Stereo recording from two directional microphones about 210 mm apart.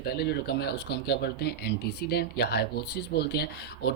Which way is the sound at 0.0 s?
50° left (ahead or behind).